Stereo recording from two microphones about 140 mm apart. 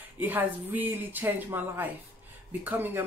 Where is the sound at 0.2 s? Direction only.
15° right (ahead or behind).